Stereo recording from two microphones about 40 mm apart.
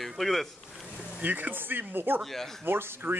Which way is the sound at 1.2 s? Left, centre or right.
Right.